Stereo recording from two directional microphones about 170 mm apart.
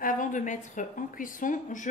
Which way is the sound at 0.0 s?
50° left (ahead or behind).